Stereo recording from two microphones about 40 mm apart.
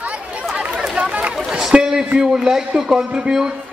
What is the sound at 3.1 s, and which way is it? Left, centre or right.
Speech, right.